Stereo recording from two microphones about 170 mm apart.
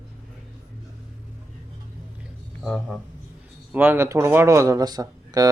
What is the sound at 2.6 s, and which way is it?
Speech, centre (ahead or behind).